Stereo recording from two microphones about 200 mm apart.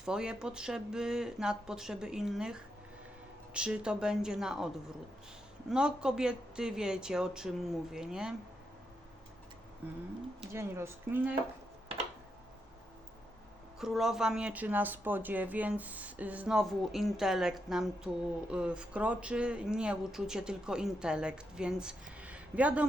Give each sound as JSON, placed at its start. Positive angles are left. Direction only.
{"t": 0.0, "sound": "speech", "side_deg": -5}
{"t": 5.7, "sound": "speech", "side_deg": -5}
{"t": 9.8, "sound": "speech", "side_deg": -10}
{"t": 13.7, "sound": "speech", "side_deg": 0}